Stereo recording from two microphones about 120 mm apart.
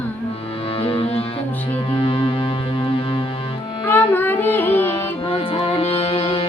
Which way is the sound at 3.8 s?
15° left (ahead or behind).